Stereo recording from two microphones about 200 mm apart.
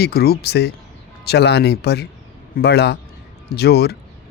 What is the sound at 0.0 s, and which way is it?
A man's voice, 50° left (ahead or behind).